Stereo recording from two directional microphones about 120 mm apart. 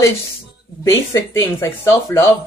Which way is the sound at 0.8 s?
25° left (ahead or behind).